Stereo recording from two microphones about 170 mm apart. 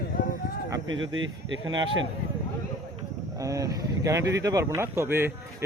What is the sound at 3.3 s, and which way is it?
Speech, 20° right (ahead or behind).